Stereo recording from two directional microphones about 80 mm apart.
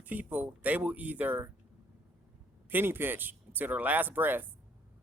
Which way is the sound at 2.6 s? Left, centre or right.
Right.